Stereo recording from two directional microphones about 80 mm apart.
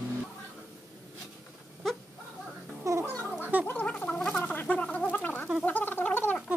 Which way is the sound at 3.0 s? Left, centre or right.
Left.